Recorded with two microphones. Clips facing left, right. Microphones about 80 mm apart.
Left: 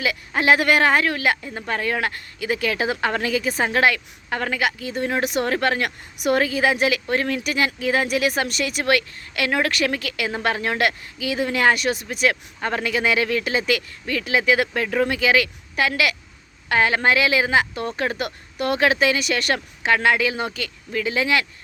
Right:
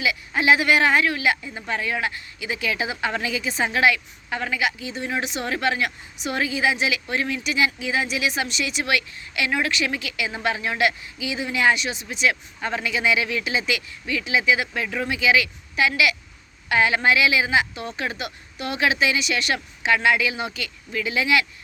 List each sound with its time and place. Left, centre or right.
0.0 s speech: left